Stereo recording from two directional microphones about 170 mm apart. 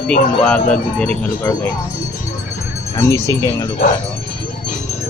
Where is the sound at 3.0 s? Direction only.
20° left (ahead or behind).